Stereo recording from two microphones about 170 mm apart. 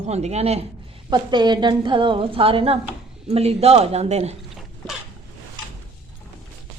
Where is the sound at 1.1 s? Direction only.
25° right (ahead or behind).